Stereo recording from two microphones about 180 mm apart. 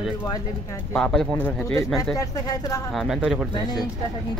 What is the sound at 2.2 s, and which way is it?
Speech, 20° left (ahead or behind).